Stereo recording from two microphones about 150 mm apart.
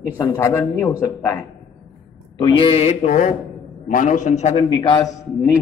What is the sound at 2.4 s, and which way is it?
A man's voice, 40° left (ahead or behind).